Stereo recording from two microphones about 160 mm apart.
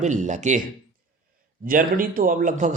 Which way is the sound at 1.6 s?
60° right (ahead or behind).